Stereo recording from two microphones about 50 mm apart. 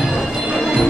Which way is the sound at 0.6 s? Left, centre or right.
Centre.